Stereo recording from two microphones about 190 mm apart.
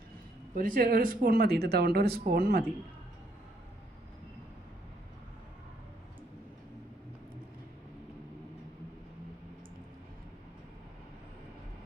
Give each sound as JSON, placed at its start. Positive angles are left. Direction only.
{"t": 0.5, "sound": "speech", "side_deg": -50}